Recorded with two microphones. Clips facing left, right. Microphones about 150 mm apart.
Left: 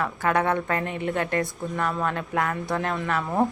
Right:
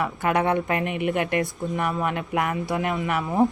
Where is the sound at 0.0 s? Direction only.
20° right (ahead or behind).